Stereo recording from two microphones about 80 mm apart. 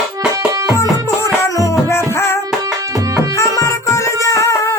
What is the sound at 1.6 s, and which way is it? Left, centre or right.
Music, left.